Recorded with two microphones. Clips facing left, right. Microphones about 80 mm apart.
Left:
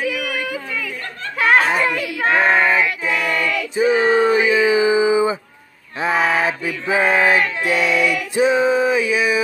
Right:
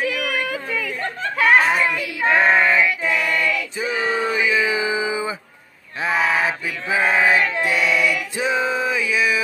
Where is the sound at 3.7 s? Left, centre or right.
Left.